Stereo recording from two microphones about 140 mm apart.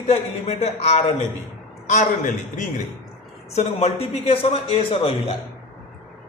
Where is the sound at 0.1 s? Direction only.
50° left (ahead or behind).